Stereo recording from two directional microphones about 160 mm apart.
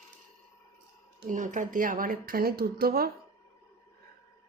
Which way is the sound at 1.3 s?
50° right (ahead or behind).